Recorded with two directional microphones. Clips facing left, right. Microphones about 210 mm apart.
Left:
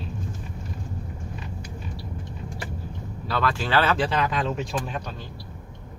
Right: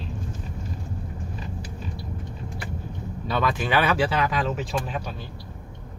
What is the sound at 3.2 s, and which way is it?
Speech, 20° right (ahead or behind).